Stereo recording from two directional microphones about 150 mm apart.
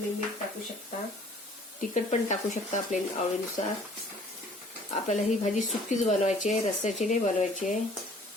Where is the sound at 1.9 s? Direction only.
50° left (ahead or behind).